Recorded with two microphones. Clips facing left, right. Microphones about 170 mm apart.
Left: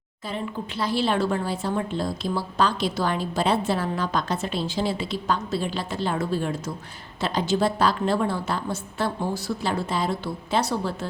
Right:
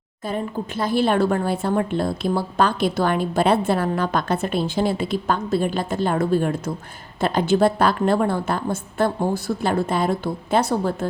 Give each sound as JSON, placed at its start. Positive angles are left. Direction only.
{"t": 0.3, "sound": "a woman's voice", "side_deg": -50}